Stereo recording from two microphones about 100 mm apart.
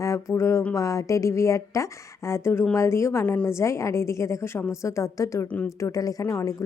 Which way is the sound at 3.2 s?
15° left (ahead or behind).